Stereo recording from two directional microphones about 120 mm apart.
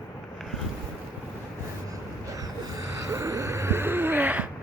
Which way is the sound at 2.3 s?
30° right (ahead or behind).